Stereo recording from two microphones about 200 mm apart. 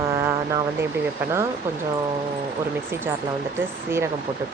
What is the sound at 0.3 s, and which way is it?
Speech, 15° right (ahead or behind).